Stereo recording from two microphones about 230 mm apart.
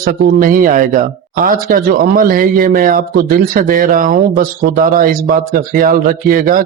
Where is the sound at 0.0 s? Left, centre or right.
Right.